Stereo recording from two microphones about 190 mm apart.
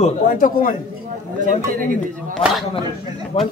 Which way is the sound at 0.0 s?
45° left (ahead or behind).